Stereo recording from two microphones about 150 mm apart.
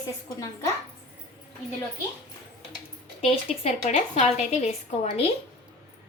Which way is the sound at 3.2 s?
45° left (ahead or behind).